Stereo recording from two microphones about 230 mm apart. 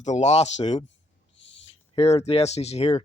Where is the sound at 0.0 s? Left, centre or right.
Left.